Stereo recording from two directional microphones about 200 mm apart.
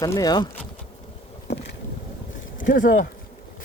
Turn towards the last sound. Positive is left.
turn(degrees=40)  # may be behind; listen again after turning